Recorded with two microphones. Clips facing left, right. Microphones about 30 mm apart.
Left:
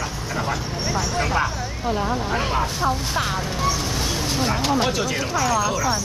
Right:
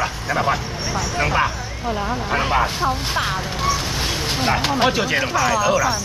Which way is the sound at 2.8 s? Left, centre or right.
Right.